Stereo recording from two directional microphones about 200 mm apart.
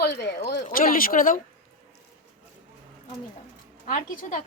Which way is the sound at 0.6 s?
45° left (ahead or behind).